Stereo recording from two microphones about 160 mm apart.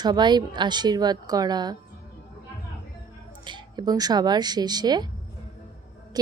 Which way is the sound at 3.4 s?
25° right (ahead or behind).